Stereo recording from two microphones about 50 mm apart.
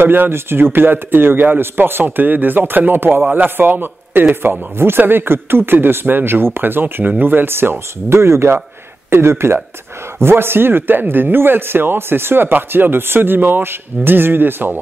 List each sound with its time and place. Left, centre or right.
0.0 s speech: right
8.2 s speech: right